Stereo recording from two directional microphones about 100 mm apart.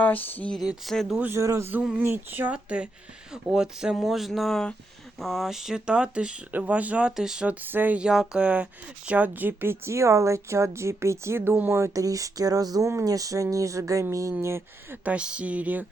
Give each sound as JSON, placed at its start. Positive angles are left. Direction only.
{"t": 0.0, "sound": "speech", "side_deg": 20}
{"t": 0.9, "sound": "speech", "side_deg": 0}
{"t": 1.2, "sound": "a woman's voice", "side_deg": -30}
{"t": 7.6, "sound": "a woman's voice", "side_deg": -20}
{"t": 11.8, "sound": "a woman's voice", "side_deg": -35}
{"t": 15.0, "sound": "speech", "side_deg": -10}